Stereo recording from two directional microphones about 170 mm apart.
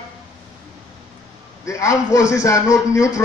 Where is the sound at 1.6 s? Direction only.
20° left (ahead or behind).